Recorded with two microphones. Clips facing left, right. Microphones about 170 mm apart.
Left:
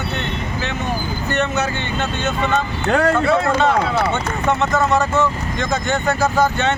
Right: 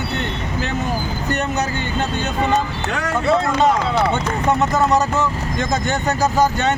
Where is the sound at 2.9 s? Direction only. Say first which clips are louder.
Left 8 dB; 55° left (ahead or behind).